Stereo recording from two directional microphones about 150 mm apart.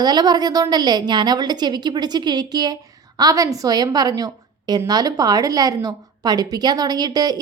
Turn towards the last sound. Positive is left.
turn(degrees=-25)  # may be behind; listen again after turning